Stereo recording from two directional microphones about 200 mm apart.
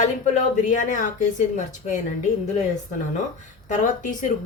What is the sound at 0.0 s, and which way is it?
A woman's voice, 40° left (ahead or behind).